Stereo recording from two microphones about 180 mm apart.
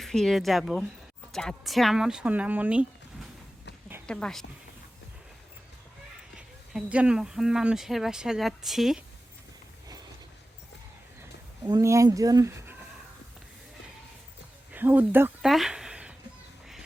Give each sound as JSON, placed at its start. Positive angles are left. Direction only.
{"t": 0.0, "sound": "speech", "side_deg": 5}
{"t": 4.0, "sound": "a woman's voice", "side_deg": 5}
{"t": 6.3, "sound": "speech", "side_deg": -5}
{"t": 11.2, "sound": "speech", "side_deg": -20}
{"t": 14.7, "sound": "a sound", "side_deg": -10}